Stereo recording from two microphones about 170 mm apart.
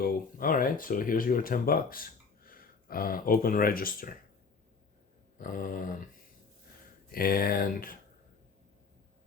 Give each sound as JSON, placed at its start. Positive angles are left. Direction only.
{"t": 0.0, "sound": "speech", "side_deg": 55}
{"t": 5.4, "sound": "a sound", "side_deg": 55}
{"t": 7.1, "sound": "speech", "side_deg": 60}